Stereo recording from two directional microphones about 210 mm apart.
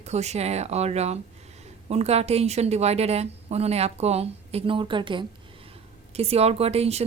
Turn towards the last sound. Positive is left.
turn(degrees=-30)  # may be behind; listen again after turning